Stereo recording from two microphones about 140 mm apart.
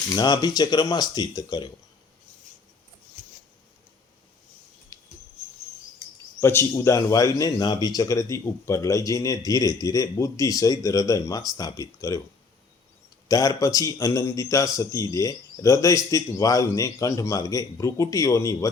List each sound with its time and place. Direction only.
0.1 s speech: 30° left (ahead or behind)
4.9 s a sound: 25° left (ahead or behind)
6.4 s speech: 20° left (ahead or behind)
13.2 s speech: 25° left (ahead or behind)